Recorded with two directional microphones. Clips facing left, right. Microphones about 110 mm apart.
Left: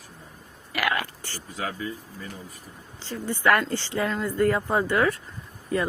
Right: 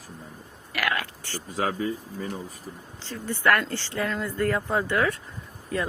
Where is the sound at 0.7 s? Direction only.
10° left (ahead or behind).